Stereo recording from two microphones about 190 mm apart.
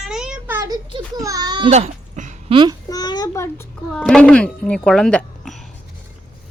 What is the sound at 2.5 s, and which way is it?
Speech, 25° right (ahead or behind).